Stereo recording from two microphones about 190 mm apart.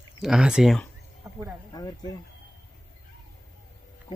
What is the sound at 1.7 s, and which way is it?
Speech, 20° left (ahead or behind).